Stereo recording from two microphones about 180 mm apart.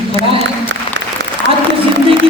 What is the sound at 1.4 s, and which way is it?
Applause, 90° right.